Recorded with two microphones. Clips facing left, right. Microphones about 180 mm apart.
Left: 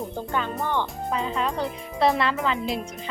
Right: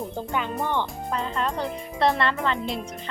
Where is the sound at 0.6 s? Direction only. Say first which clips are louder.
Right 1 dB; 15° right (ahead or behind).